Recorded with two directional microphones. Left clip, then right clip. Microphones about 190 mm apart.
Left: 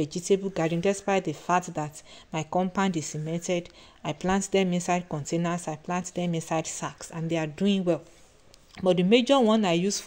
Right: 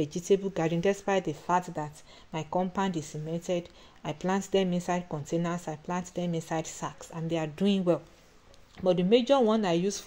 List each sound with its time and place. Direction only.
0.0 s speech: 5° left (ahead or behind)
8.7 s speech: 15° left (ahead or behind)